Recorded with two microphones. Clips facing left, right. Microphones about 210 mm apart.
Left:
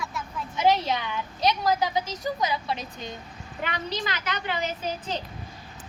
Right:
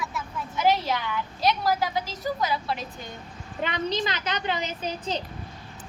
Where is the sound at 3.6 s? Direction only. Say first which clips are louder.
Right 4 dB; 25° right (ahead or behind).